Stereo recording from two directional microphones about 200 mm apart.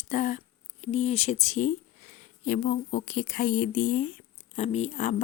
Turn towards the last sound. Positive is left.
turn(degrees=35)  # may be behind; listen again after turning